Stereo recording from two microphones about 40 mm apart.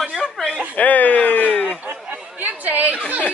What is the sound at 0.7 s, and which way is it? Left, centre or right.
Speech, left.